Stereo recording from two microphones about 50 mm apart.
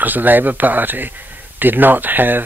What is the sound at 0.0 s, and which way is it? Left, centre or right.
Speech, right.